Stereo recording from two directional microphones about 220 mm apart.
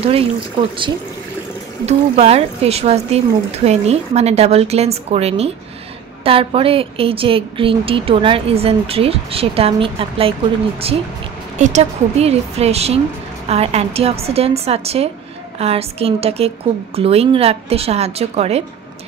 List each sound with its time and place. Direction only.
0.0 s a woman's voice: 25° right (ahead or behind)
11.5 s a woman's voice: 30° right (ahead or behind)